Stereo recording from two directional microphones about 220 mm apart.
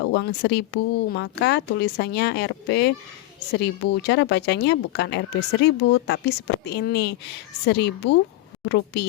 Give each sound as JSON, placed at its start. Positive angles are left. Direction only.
{"t": 0.0, "sound": "speech", "side_deg": 50}